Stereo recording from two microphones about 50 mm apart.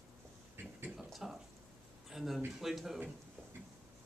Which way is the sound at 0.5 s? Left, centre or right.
Right.